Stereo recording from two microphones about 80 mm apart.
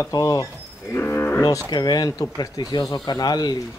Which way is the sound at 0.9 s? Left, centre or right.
Left.